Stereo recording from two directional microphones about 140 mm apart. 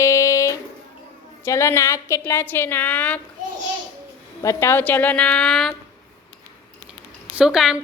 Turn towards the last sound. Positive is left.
turn(degrees=-5)  # may be behind; listen again after turning